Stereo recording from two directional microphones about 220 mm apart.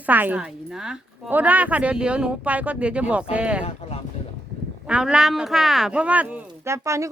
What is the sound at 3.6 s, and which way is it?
Speech, 25° left (ahead or behind).